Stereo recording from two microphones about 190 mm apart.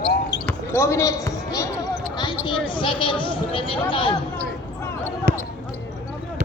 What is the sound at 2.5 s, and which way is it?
Speech, 25° left (ahead or behind).